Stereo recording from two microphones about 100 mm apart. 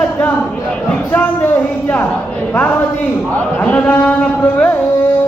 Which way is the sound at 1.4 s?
15° left (ahead or behind).